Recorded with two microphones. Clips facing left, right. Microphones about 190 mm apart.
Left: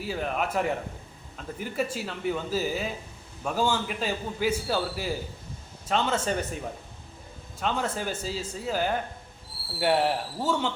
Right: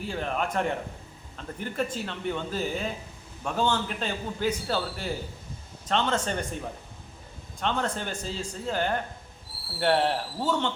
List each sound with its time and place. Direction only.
0.0 s a man's voice: 5° left (ahead or behind)
7.6 s a man's voice: 5° left (ahead or behind)